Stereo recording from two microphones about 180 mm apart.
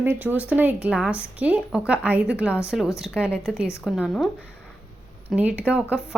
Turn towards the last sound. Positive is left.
turn(degrees=-5)  # may be behind; listen again after turning